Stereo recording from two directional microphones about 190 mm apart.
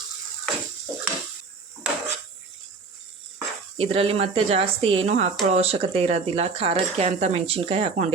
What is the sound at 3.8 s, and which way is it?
Speech, 30° right (ahead or behind).